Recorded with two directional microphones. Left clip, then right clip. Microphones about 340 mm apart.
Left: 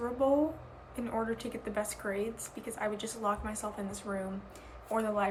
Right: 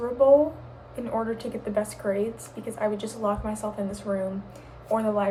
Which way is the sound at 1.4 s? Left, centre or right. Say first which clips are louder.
Right 8 dB; centre.